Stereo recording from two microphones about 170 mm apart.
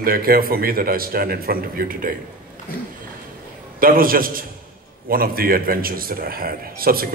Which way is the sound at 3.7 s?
55° right (ahead or behind).